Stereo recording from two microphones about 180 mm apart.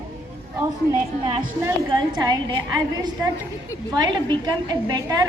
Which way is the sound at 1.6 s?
20° right (ahead or behind).